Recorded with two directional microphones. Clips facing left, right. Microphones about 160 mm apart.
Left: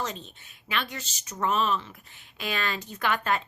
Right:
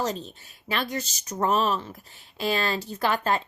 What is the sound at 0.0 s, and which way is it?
A woman's voice, 35° right (ahead or behind).